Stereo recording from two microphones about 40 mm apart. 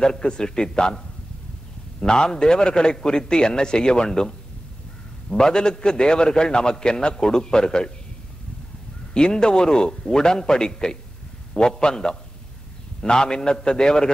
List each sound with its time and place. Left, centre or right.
0.0 s a man's voice: centre
9.1 s a man's voice: centre